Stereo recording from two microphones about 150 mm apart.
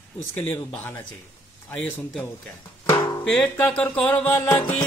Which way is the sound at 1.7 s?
5° left (ahead or behind).